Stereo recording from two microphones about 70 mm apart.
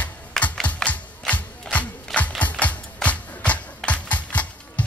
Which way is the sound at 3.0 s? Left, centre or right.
Left.